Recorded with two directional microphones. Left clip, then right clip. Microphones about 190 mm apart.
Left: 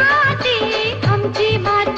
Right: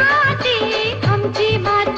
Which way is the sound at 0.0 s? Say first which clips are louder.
Even; centre (ahead or behind).